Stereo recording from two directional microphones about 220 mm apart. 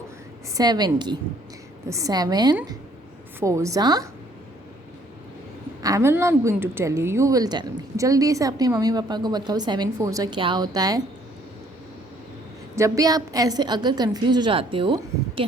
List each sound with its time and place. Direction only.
0.5 s a woman's voice: 20° right (ahead or behind)
5.8 s a woman's voice: 15° right (ahead or behind)
12.7 s a woman's voice: 15° right (ahead or behind)